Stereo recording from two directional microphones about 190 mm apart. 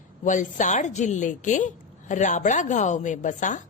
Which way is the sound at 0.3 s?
40° left (ahead or behind).